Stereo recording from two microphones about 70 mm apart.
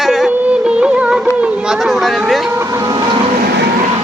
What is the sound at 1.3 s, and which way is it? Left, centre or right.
Speech, centre.